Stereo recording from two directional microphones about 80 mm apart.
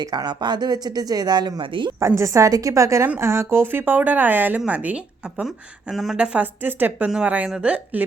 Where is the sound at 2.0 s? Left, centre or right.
Right; by 5.4 s centre.